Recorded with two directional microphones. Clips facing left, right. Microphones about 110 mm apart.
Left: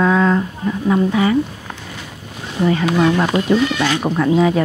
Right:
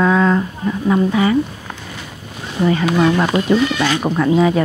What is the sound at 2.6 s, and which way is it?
Speech, 25° right (ahead or behind).